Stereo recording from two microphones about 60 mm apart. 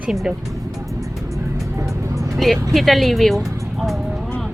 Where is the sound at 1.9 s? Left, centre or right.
Right.